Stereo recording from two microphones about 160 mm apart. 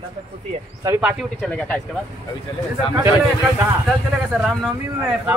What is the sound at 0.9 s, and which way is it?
Speech, 5° right (ahead or behind).